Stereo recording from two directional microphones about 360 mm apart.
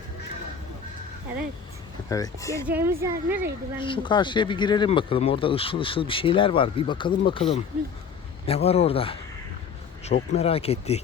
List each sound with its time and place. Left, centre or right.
2.0 s speech: centre
2.6 s speech: centre
3.8 s speech: centre